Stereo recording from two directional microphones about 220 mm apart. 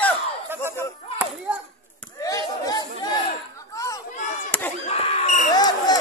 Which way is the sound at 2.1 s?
15° left (ahead or behind).